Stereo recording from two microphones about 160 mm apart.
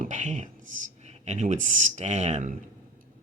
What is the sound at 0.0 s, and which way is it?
Speech, 50° right (ahead or behind).